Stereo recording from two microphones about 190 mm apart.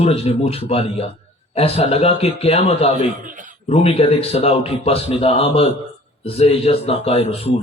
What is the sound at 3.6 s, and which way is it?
A man's voice, 30° left (ahead or behind).